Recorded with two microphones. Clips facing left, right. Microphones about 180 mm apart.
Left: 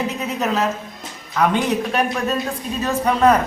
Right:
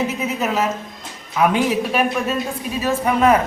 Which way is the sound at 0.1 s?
5° right (ahead or behind).